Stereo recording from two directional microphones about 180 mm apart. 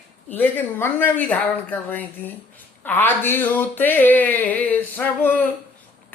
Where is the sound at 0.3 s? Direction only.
10° left (ahead or behind).